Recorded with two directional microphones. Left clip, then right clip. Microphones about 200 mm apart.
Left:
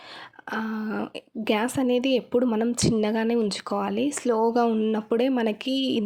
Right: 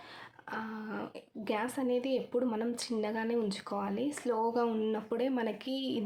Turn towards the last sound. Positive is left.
turn(degrees=35)  # may be behind; listen again after turning